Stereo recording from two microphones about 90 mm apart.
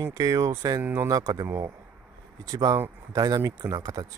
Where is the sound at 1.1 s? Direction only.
45° right (ahead or behind).